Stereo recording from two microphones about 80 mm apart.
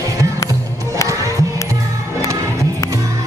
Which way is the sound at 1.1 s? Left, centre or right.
Right.